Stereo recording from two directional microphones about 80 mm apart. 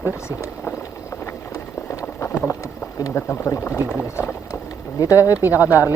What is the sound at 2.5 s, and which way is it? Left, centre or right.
Speech, left.